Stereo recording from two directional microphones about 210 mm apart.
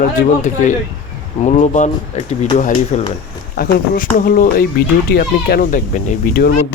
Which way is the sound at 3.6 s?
45° left (ahead or behind).